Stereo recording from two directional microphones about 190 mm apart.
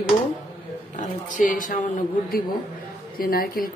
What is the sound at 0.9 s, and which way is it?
A man's voice, 45° left (ahead or behind).